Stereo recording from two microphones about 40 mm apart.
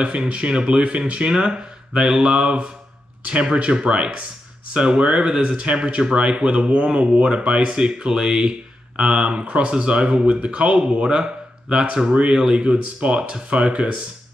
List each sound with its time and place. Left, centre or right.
0.0 s speech: right